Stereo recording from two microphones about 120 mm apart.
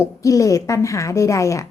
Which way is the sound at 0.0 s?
25° left (ahead or behind).